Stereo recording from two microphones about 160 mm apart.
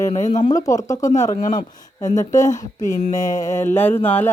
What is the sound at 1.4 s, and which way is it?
Speech, 55° left (ahead or behind).